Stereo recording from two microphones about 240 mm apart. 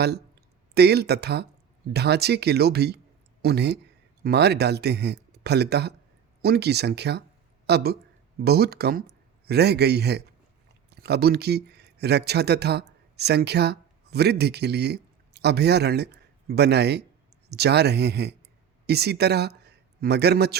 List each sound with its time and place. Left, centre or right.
0.7 s speech: right